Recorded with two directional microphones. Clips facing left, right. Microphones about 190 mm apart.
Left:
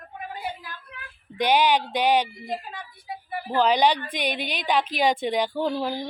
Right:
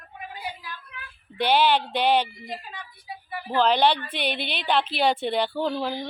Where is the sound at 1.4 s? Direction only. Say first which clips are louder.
Even; 15° left (ahead or behind).